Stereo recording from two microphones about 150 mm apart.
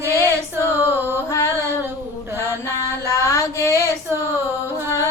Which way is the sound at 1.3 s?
20° left (ahead or behind).